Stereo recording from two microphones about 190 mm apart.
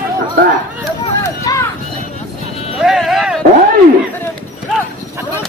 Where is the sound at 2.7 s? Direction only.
Centre (ahead or behind).